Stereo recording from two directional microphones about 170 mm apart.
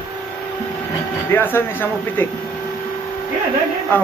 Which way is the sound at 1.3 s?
15° left (ahead or behind).